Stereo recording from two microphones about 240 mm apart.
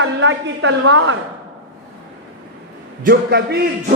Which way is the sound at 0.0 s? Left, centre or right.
Right.